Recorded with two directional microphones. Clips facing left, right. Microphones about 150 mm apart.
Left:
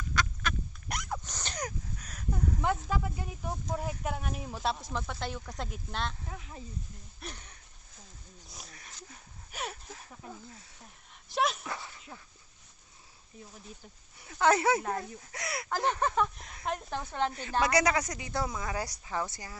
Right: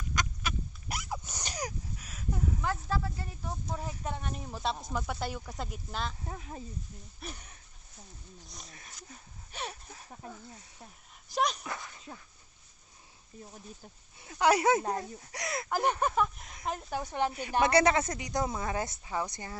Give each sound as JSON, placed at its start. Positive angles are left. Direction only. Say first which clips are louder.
{"t": 0.4, "sound": "dog", "louder": "left 2 dB", "side_deg": -5}
{"t": 2.6, "sound": "a sound", "louder": "left 2 dB", "side_deg": 15}
{"t": 4.9, "sound": "speech", "louder": "right 1 dB", "side_deg": -5}
{"t": 6.2, "sound": "speech", "louder": "right 3 dB", "side_deg": -40}
{"t": 7.2, "sound": "speech", "louder": "right 1 dB", "side_deg": 0}
{"t": 9.5, "sound": "a sound", "louder": "left 1 dB", "side_deg": 10}
{"t": 11.3, "sound": "speech", "louder": "even", "side_deg": 0}
{"t": 12.1, "sound": "speech", "louder": "right 5 dB", "side_deg": -30}
{"t": 14.2, "sound": "a sound", "louder": "even", "side_deg": -25}
{"t": 14.4, "sound": "speech", "louder": "right 1 dB", "side_deg": -15}
{"t": 17.0, "sound": "speech", "louder": "right 1 dB", "side_deg": -15}
{"t": 17.7, "sound": "speech", "louder": "right 4 dB", "side_deg": -30}
{"t": 18.5, "sound": "speech", "louder": "right 2 dB", "side_deg": -30}